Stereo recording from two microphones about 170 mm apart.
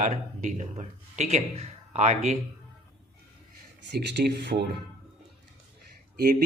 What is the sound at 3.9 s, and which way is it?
Speech, 85° right.